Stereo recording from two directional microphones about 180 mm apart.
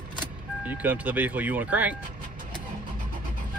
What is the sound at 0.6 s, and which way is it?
Speech, 10° right (ahead or behind).